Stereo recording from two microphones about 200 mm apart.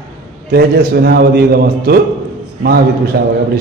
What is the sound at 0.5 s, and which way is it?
A man's voice, 50° right (ahead or behind).